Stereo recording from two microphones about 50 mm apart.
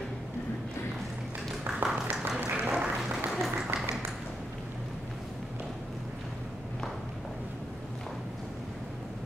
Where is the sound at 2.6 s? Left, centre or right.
Right.